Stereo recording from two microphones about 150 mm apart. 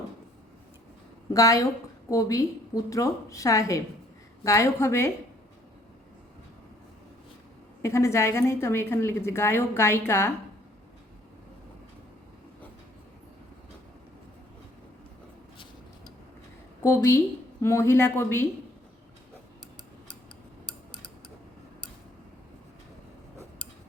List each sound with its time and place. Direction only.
1.3 s a woman's voice: 25° left (ahead or behind)
7.8 s a woman's voice: 20° left (ahead or behind)
16.8 s a woman's voice: 20° left (ahead or behind)